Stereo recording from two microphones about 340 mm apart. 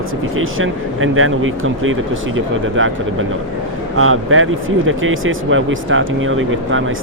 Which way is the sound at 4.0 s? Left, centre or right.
Right.